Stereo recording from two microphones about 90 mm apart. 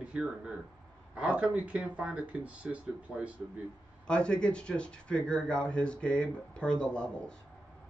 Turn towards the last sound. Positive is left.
turn(degrees=10)  # may be behind; listen again after turning